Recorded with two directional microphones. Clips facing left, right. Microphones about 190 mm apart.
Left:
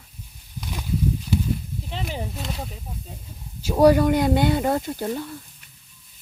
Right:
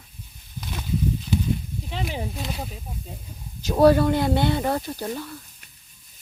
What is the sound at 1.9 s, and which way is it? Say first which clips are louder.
Speech: right 1 dB; 5° right (ahead or behind).